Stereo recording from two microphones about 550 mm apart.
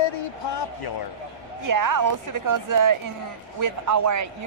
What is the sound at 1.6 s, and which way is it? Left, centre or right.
A woman's voice, right.